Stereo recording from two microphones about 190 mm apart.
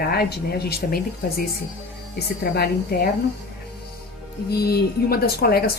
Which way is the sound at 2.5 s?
55° left (ahead or behind).